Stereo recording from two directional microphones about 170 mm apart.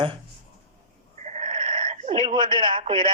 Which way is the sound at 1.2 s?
45° right (ahead or behind).